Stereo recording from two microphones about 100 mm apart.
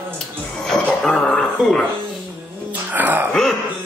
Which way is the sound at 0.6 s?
5° left (ahead or behind).